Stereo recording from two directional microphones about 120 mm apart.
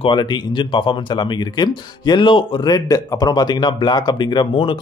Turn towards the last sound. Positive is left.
turn(degrees=40)  # may be behind; listen again after turning